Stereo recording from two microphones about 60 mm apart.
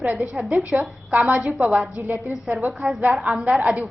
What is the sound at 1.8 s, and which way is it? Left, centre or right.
Speech, right.